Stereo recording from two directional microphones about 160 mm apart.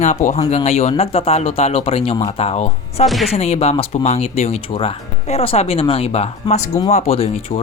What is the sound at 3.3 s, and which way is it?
Speech, 40° left (ahead or behind).